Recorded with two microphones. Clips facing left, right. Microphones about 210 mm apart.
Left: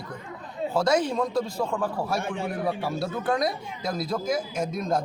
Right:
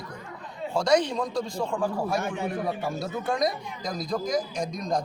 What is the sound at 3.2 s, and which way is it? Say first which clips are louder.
A man's voice: even; centre (ahead or behind).